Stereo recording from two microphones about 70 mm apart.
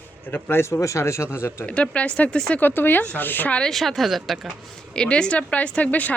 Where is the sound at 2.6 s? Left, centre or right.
Left.